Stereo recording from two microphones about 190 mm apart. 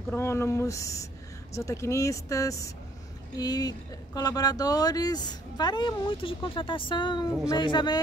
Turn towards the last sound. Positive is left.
turn(degrees=25)  # may be behind; listen again after turning